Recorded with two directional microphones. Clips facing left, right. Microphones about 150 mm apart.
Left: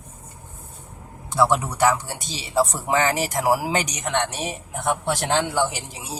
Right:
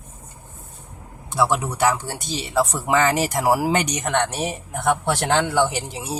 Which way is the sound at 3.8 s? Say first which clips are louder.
Right 3 dB; 60° right (ahead or behind).